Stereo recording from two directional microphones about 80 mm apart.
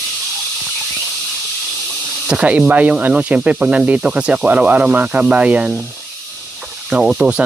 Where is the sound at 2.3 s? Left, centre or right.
Centre.